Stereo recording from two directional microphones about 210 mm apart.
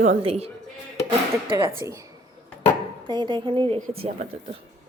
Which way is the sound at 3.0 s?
20° right (ahead or behind).